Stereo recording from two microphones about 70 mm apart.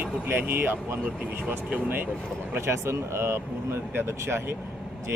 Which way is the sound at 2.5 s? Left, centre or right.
Right.